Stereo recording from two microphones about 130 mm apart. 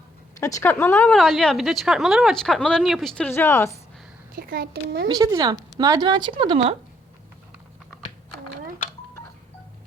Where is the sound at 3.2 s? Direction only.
20° left (ahead or behind).